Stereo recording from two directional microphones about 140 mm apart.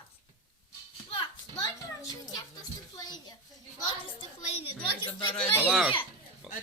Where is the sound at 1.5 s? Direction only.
25° left (ahead or behind).